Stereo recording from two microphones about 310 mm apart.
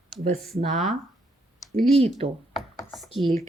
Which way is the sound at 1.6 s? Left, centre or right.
Centre.